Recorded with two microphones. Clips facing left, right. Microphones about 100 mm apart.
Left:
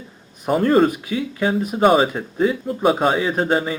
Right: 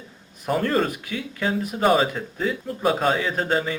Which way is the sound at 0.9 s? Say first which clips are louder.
Left 6 dB; 20° left (ahead or behind).